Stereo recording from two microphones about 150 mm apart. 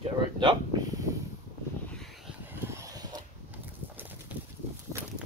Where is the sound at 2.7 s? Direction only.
25° right (ahead or behind).